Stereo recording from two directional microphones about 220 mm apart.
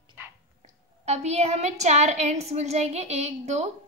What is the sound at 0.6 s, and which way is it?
A woman's voice, 30° right (ahead or behind).